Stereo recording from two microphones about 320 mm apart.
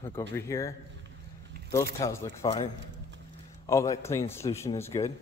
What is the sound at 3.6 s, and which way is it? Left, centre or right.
Speech, centre.